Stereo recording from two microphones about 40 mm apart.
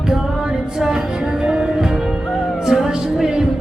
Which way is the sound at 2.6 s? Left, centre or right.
Centre.